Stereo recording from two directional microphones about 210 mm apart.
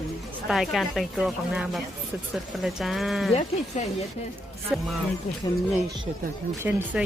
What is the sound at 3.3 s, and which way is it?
Speech, 35° left (ahead or behind).